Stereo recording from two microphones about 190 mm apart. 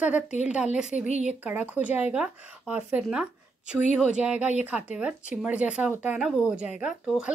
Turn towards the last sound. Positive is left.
turn(degrees=-5)  # may be behind; listen again after turning